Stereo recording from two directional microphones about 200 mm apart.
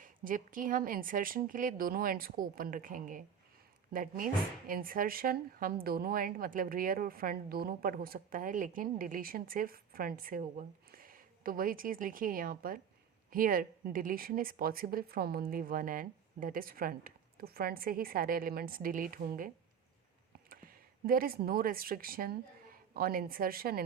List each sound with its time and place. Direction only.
0.0 s speech: 45° right (ahead or behind)
20.5 s speech: 45° right (ahead or behind)